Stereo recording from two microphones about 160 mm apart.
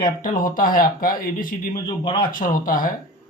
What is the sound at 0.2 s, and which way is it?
Speech, 60° left (ahead or behind).